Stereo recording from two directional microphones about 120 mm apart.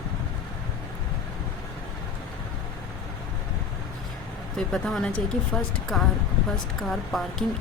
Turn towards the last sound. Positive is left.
turn(degrees=0)  # may be behind; listen again after turning